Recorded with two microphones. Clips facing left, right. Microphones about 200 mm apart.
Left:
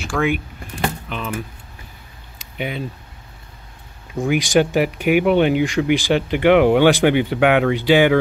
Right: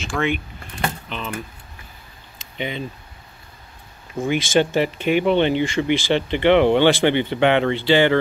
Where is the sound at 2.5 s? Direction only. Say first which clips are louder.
Left 1 dB; 5° left (ahead or behind).